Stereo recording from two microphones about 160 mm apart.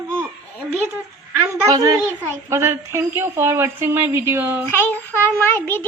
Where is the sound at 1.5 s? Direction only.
20° right (ahead or behind).